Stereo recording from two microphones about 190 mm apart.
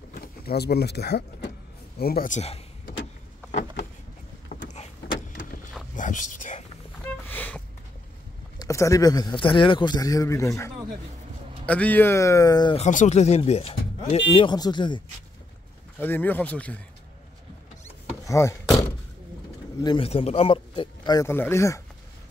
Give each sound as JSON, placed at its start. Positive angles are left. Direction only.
{"t": 0.1, "sound": "speech", "side_deg": 55}
{"t": 4.5, "sound": "power windows", "side_deg": 35}
{"t": 5.9, "sound": "whispering", "side_deg": 40}
{"t": 7.2, "sound": "a sound", "side_deg": 10}
{"t": 8.5, "sound": "a man's voice", "side_deg": 15}
{"t": 12.7, "sound": "a man's voice", "side_deg": 40}
{"t": 16.0, "sound": "speech", "side_deg": 10}
{"t": 18.3, "sound": "speech", "side_deg": 15}
{"t": 19.8, "sound": "a man's voice", "side_deg": 25}